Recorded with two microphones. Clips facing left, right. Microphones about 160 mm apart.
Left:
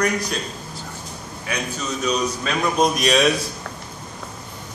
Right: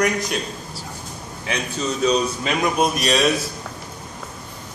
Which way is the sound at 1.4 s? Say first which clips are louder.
Right 2 dB; 30° right (ahead or behind).